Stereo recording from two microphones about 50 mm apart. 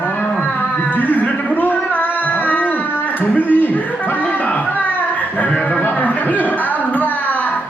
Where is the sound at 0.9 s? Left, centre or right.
Left.